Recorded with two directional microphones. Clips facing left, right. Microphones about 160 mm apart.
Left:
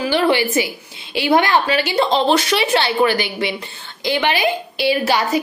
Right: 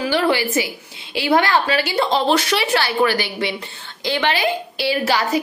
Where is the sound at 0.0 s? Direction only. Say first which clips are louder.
Left 2 dB; 20° left (ahead or behind).